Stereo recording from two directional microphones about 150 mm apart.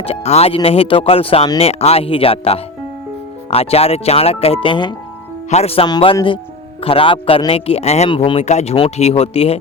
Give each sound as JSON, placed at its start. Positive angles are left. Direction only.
{"t": 0.0, "sound": "speech", "side_deg": 45}
{"t": 5.5, "sound": "speech", "side_deg": 45}
{"t": 5.8, "sound": "speech", "side_deg": 30}